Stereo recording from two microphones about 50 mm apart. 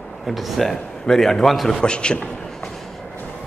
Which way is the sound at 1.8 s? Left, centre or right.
Centre.